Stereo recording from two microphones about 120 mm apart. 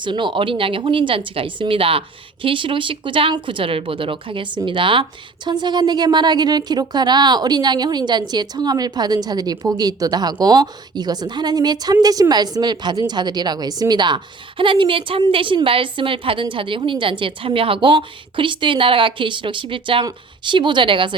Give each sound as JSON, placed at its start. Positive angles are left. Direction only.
{"t": 0.0, "sound": "a woman's voice", "side_deg": -40}